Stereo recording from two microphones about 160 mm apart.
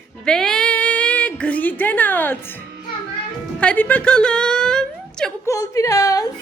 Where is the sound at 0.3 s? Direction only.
5° left (ahead or behind).